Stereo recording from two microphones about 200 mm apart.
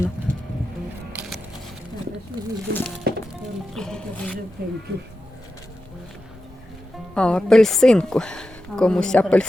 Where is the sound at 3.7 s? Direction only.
5° left (ahead or behind).